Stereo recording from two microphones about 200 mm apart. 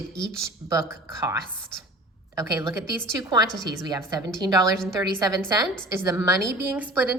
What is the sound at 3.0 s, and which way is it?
A woman's voice, 15° right (ahead or behind).